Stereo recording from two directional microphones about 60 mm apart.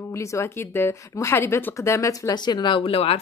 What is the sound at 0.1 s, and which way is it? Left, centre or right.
Speech, left.